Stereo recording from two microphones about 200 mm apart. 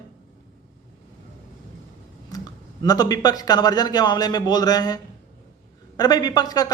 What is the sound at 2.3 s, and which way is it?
Speech, 20° left (ahead or behind).